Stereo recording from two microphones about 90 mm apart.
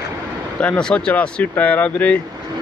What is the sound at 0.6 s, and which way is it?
Speech, 10° left (ahead or behind).